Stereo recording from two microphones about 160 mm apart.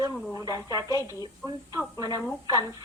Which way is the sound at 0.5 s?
20° right (ahead or behind).